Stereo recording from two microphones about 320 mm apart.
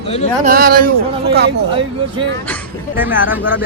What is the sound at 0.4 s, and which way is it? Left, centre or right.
Speech, right.